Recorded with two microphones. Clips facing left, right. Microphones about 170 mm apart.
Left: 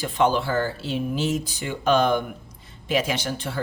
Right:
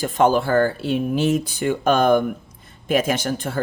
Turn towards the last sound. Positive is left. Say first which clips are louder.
# right 5 dB
turn(degrees=-50)  # may be behind; listen again after turning